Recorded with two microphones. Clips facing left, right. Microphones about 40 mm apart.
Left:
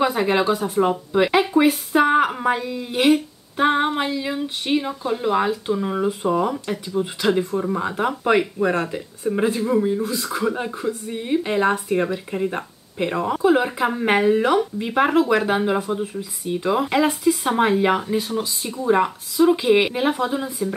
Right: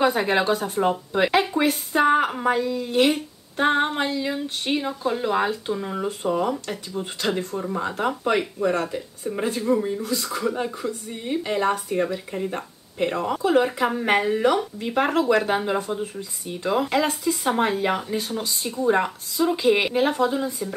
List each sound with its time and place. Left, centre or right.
0.0 s speech: centre
1.5 s speech: centre
5.9 s speech: centre